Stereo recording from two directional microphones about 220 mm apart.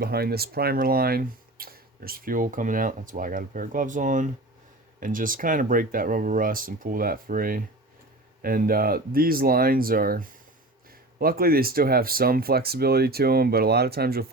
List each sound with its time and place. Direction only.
0.0 s speech: 45° right (ahead or behind)